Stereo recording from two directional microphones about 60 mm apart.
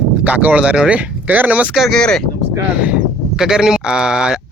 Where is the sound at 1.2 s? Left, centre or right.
Right.